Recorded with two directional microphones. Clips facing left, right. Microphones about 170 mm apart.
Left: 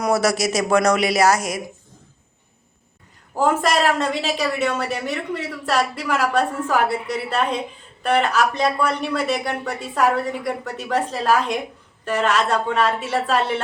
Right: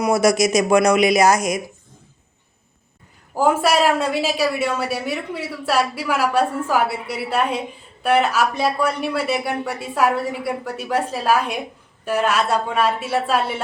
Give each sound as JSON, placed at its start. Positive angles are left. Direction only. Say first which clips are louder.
{"t": 0.0, "sound": "speech", "louder": "right 3 dB", "side_deg": -15}
{"t": 3.3, "sound": "speech", "louder": "right 2 dB", "side_deg": -10}